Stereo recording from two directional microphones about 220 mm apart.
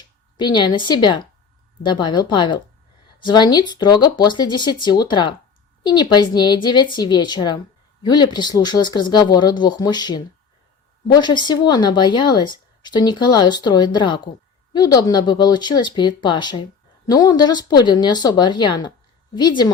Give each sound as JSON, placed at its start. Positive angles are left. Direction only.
{"t": 0.3, "sound": "speech", "side_deg": 20}